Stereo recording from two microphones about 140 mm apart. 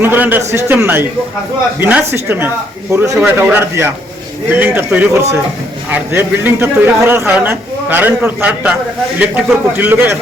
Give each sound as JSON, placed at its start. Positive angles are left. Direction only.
{"t": 0.0, "sound": "a man's voice", "side_deg": -15}